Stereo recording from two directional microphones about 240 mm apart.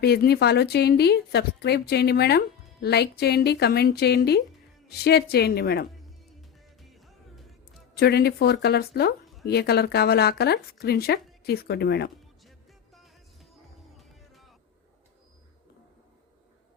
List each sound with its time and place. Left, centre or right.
0.0 s speech: left
6.9 s music: centre
7.9 s speech: left
12.5 s music: centre